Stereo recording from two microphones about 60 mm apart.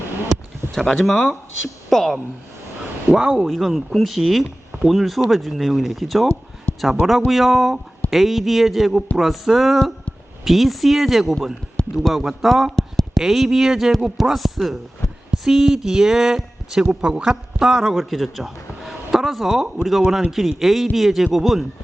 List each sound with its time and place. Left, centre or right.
0.7 s speech: centre
3.4 s speech: centre
6.7 s a sound: left
7.3 s a man's voice: centre